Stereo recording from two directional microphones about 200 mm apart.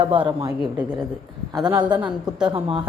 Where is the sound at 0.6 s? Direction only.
5° right (ahead or behind).